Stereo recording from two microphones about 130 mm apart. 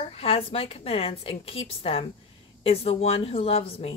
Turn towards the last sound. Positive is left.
turn(degrees=45)  # may be behind; listen again after turning